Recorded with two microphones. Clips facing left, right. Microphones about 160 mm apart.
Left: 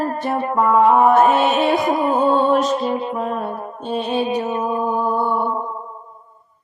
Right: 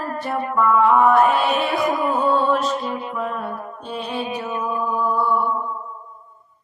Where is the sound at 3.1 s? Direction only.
40° left (ahead or behind).